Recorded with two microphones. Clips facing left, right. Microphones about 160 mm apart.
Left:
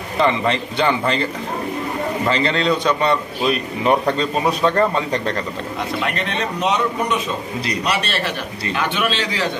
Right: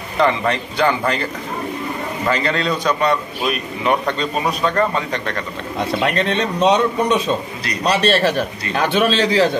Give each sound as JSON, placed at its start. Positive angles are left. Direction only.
{"t": 0.2, "sound": "a man's voice", "side_deg": 25}
{"t": 5.9, "sound": "a man's voice", "side_deg": -35}